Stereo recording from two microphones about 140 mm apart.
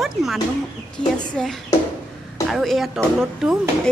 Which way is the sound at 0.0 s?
Centre (ahead or behind).